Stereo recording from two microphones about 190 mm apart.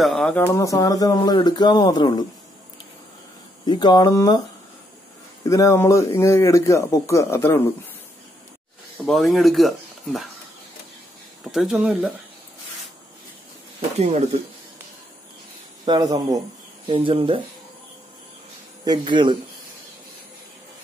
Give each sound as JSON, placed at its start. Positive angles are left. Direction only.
{"t": 0.0, "sound": "speech", "side_deg": 0}
{"t": 0.5, "sound": "speech", "side_deg": 15}
{"t": 3.6, "sound": "speech", "side_deg": 20}
{"t": 5.4, "sound": "speech", "side_deg": 15}
{"t": 9.0, "sound": "speech", "side_deg": 0}
{"t": 11.4, "sound": "speech", "side_deg": 0}
{"t": 13.9, "sound": "speech", "side_deg": -35}
{"t": 15.8, "sound": "speech", "side_deg": -20}
{"t": 18.9, "sound": "speech", "side_deg": -25}